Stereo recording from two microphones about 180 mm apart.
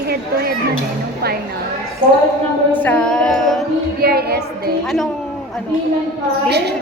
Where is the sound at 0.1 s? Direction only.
60° right (ahead or behind).